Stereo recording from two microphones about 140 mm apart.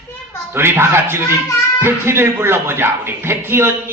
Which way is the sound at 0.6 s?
20° right (ahead or behind).